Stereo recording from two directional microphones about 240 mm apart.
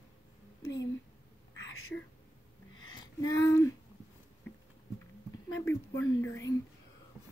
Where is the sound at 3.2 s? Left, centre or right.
Centre.